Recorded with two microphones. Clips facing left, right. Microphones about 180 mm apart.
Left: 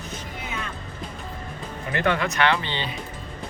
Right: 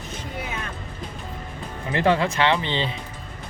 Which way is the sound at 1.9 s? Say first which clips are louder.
Right 3 dB; 30° right (ahead or behind).